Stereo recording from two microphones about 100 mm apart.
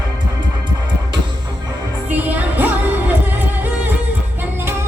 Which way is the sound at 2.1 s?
15° right (ahead or behind).